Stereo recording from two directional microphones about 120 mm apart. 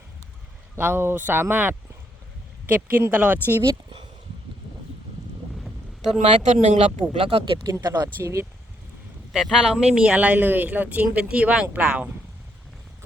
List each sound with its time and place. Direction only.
0.8 s speech: 20° right (ahead or behind)
5.6 s boat: 5° right (ahead or behind)
6.1 s speech: 75° right (ahead or behind)
7.2 s speech: 50° right (ahead or behind)
7.9 s speech: 30° right (ahead or behind)
9.3 s speech: 5° right (ahead or behind)